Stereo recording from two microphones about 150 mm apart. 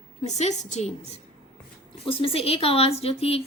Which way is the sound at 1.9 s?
40° left (ahead or behind).